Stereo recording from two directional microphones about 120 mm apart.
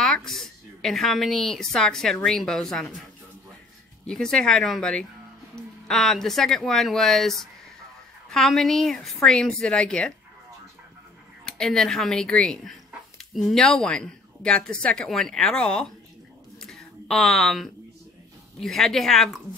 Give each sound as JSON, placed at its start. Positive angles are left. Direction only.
{"t": 0.0, "sound": "a woman's voice", "side_deg": 5}
{"t": 4.1, "sound": "speech", "side_deg": 5}
{"t": 11.4, "sound": "speech", "side_deg": 5}
{"t": 16.5, "sound": "a sound", "side_deg": 5}
{"t": 18.6, "sound": "speech", "side_deg": 5}